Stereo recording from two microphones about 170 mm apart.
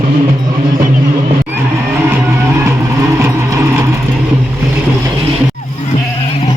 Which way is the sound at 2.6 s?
15° right (ahead or behind).